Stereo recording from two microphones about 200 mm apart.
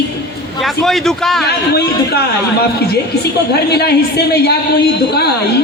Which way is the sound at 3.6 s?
55° left (ahead or behind).